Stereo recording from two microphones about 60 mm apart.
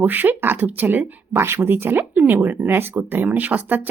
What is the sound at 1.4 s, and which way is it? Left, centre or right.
Speech, right.